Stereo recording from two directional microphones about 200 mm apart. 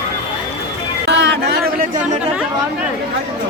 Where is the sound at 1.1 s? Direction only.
60° right (ahead or behind).